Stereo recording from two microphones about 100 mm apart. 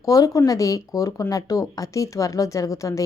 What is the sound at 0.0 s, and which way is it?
Speech, 35° left (ahead or behind).